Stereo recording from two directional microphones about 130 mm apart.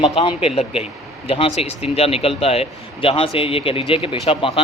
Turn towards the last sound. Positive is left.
turn(degrees=45)  # may be behind; listen again after turning